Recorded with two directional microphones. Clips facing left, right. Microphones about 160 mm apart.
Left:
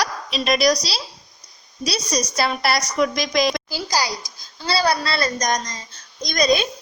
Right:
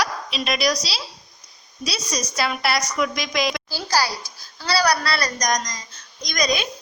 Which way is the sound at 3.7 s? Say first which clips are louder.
Right 1 dB; 15° left (ahead or behind).